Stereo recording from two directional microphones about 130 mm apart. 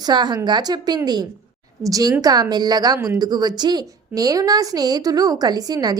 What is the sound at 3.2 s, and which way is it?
A woman's voice, 30° right (ahead or behind).